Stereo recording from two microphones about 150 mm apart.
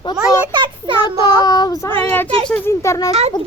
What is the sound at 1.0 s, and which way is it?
Child singing, 30° left (ahead or behind).